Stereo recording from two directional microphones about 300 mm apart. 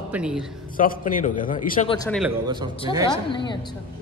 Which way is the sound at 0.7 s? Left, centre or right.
Left.